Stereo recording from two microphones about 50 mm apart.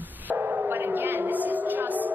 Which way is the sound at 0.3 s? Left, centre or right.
Right.